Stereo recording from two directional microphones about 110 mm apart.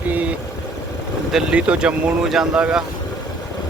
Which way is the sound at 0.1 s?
15° right (ahead or behind).